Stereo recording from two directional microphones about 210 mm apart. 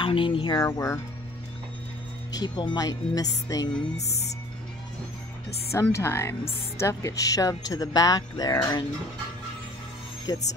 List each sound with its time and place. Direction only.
0.0 s speech: 25° left (ahead or behind)
2.3 s speech: 20° left (ahead or behind)
5.7 s speech: 15° left (ahead or behind)
10.3 s speech: 15° left (ahead or behind)